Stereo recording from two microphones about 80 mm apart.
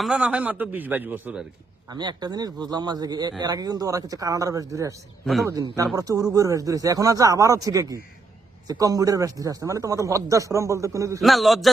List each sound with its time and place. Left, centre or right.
0.1 s a man's voice: centre
1.9 s speech: right
5.2 s a man's voice: centre
5.7 s speech: right
11.2 s a man's voice: centre